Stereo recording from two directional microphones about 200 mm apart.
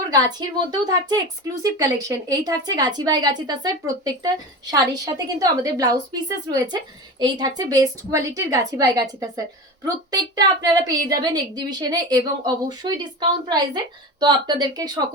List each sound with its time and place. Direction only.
0.3 s a woman's voice: 20° right (ahead or behind)